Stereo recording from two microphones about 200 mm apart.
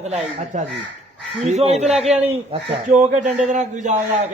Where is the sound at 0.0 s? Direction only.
35° right (ahead or behind).